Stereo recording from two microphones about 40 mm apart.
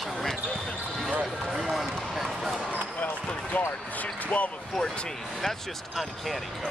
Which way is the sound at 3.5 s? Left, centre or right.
Left.